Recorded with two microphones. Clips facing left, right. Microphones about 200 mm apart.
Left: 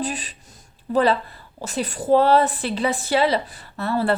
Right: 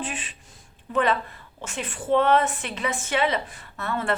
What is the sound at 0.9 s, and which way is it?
A woman's voice, 35° left (ahead or behind).